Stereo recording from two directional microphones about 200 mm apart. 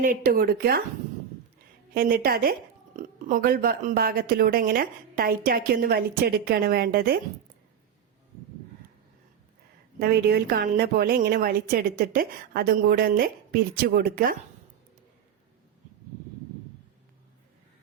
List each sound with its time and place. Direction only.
0.0 s speech: 45° right (ahead or behind)
1.9 s speech: 45° right (ahead or behind)
10.0 s speech: 50° right (ahead or behind)